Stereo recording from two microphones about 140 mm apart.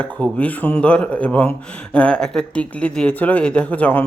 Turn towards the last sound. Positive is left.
turn(degrees=10)  # may be behind; listen again after turning